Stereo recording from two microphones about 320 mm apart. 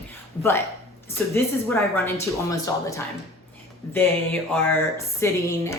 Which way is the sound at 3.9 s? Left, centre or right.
Centre.